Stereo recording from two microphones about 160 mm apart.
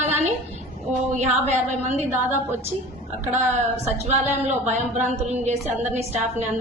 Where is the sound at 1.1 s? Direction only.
45° right (ahead or behind).